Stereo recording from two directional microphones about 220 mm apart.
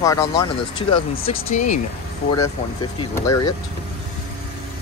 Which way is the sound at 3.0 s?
15° left (ahead or behind).